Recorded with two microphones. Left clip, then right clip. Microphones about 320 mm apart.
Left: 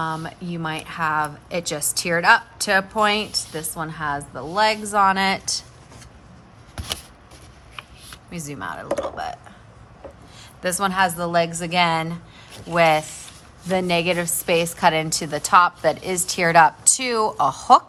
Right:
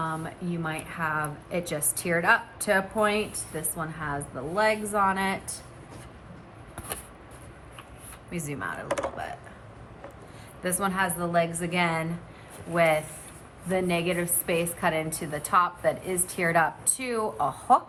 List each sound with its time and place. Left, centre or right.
0.0 s a woman's voice: centre
6.7 s a sound: left
8.3 s a woman's voice: centre
10.6 s a woman's voice: centre